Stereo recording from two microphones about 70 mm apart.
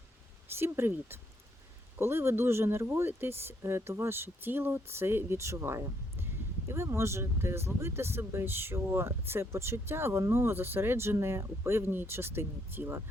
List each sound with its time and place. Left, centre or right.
0.5 s speech: right